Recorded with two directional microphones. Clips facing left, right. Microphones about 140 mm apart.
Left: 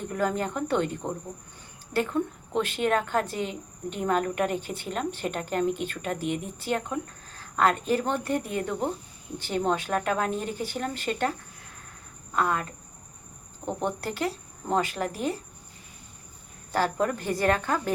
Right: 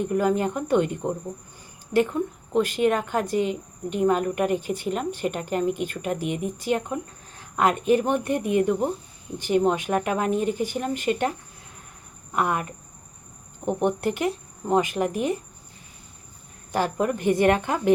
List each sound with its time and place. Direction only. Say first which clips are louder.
0.1 s speech: right 2 dB; 10° right (ahead or behind)
13.7 s speech: right 6 dB; 15° right (ahead or behind)
16.7 s speech: right 2 dB; 15° right (ahead or behind)